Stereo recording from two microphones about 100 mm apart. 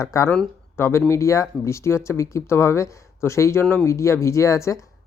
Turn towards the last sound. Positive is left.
turn(degrees=30)  # may be behind; listen again after turning